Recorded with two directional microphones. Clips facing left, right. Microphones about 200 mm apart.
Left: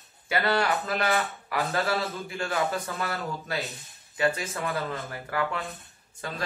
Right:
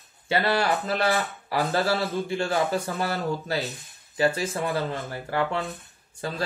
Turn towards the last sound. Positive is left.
turn(degrees=-30)  # may be behind; listen again after turning